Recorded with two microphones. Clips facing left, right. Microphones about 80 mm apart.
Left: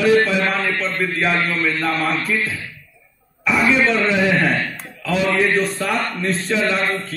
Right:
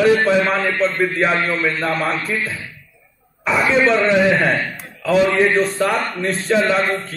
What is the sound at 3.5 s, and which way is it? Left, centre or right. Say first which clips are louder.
A man's voice: right 1 dB; right.